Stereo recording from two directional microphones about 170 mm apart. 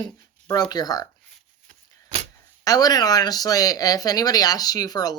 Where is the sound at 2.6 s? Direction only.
20° left (ahead or behind).